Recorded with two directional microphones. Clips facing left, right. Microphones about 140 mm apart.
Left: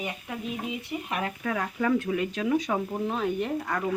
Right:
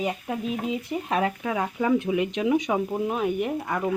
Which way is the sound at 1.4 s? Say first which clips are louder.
Right 2 dB; 15° right (ahead or behind).